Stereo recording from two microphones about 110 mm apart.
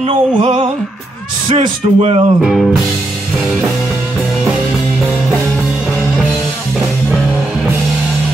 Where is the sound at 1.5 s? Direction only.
65° right (ahead or behind).